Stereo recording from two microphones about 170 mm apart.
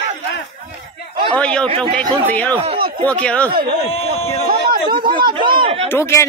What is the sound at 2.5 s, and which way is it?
Speech, 30° right (ahead or behind).